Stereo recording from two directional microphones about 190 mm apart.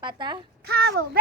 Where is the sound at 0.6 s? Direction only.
60° right (ahead or behind).